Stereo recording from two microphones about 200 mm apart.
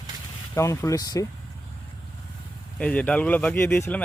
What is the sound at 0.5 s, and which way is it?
Speech, 15° left (ahead or behind).